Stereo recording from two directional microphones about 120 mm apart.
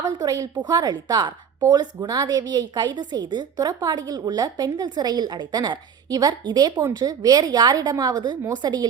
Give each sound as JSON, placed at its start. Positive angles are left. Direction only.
{"t": 0.0, "sound": "a woman's voice", "side_deg": -30}